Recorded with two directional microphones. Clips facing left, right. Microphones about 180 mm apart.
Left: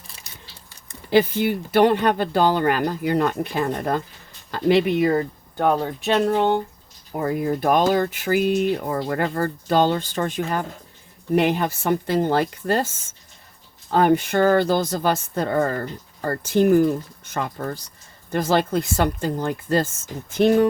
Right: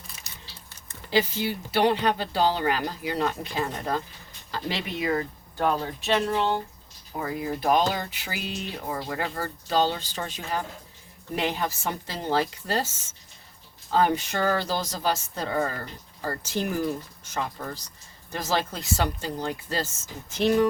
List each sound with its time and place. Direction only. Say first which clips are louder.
1.1 s speech: left 7 dB; 55° left (ahead or behind)